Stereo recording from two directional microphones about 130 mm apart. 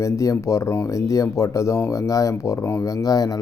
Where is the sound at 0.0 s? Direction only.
25° left (ahead or behind).